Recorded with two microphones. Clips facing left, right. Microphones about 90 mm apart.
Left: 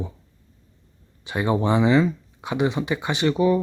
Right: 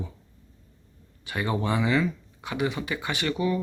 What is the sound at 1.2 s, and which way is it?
Speech, 25° left (ahead or behind).